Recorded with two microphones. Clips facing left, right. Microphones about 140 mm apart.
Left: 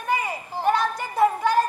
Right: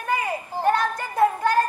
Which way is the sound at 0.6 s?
45° right (ahead or behind).